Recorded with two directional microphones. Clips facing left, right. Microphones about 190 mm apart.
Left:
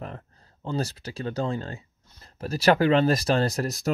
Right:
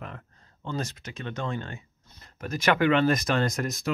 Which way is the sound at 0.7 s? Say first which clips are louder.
Left 4 dB; 35° left (ahead or behind).